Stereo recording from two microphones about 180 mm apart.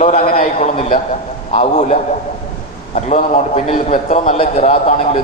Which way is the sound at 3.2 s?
40° left (ahead or behind).